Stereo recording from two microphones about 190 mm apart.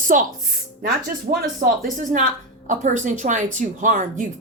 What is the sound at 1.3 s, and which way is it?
A woman's voice, 50° right (ahead or behind).